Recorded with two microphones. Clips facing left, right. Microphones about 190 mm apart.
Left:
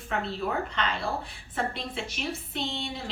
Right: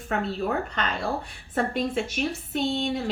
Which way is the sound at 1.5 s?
45° right (ahead or behind).